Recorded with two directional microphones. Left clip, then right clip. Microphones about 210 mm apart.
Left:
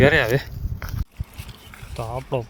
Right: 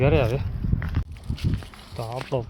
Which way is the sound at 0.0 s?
25° left (ahead or behind).